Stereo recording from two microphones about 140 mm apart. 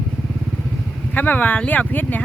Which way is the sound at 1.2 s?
15° left (ahead or behind).